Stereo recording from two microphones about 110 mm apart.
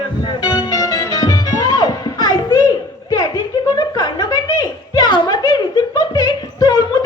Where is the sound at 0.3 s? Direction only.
35° left (ahead or behind).